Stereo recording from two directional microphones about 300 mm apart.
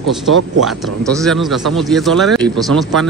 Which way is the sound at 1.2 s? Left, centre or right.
Centre.